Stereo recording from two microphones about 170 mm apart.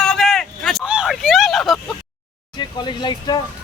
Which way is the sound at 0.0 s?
Centre (ahead or behind).